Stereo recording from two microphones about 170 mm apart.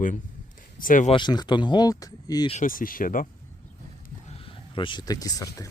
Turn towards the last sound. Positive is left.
turn(degrees=20)  # may be behind; listen again after turning